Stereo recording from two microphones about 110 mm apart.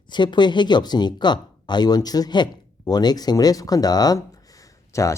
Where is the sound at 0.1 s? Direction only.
45° left (ahead or behind).